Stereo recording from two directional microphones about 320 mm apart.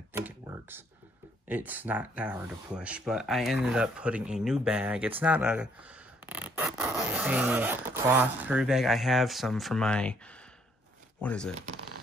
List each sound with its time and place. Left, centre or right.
0.1 s computer keyboard: centre
1.5 s speech: centre
11.1 s speech: centre
11.5 s speech: right